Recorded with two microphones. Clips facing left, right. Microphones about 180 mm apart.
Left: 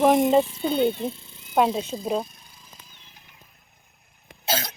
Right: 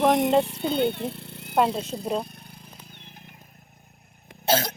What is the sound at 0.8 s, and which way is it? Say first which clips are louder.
Wild animals: left 3 dB; 65° right (ahead or behind).